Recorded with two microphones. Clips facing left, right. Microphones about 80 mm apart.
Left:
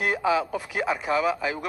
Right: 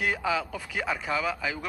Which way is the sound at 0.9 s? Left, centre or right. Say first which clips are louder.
Left 5 dB; centre.